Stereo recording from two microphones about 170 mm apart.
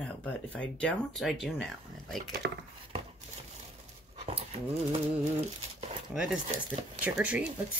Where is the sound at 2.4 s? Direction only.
75° right (ahead or behind).